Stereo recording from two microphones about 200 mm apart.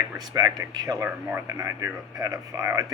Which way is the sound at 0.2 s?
20° right (ahead or behind).